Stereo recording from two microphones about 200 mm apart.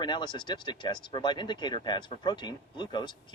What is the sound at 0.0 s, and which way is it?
Speech, 20° left (ahead or behind).